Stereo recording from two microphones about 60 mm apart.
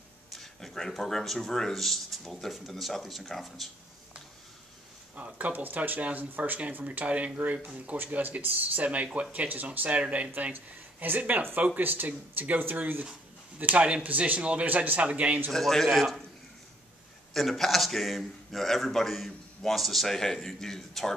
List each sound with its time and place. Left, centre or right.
0.3 s a man's voice: centre
5.1 s speech: right
15.5 s a man's voice: centre
17.3 s a man's voice: centre